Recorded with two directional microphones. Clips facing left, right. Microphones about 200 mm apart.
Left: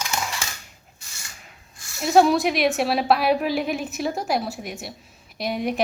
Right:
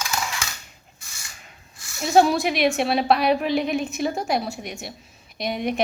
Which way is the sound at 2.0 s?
Centre (ahead or behind).